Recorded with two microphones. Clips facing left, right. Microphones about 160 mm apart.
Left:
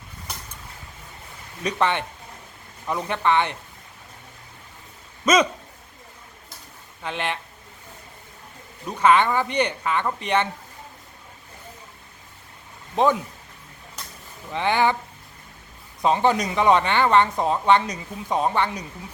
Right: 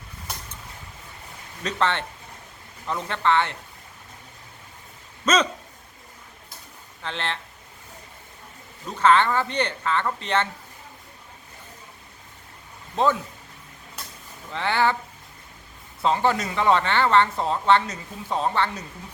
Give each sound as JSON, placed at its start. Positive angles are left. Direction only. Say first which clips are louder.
{"t": 1.6, "sound": "speech", "louder": "left 2 dB", "side_deg": 15}
{"t": 5.2, "sound": "speech", "louder": "left 3 dB", "side_deg": 10}
{"t": 7.0, "sound": "speech", "louder": "left 3 dB", "side_deg": 15}
{"t": 8.9, "sound": "speech", "louder": "left 1 dB", "side_deg": 15}
{"t": 13.0, "sound": "speech", "louder": "left 2 dB", "side_deg": 15}
{"t": 14.5, "sound": "speech", "louder": "left 2 dB", "side_deg": 15}
{"t": 16.0, "sound": "speech", "louder": "left 2 dB", "side_deg": 15}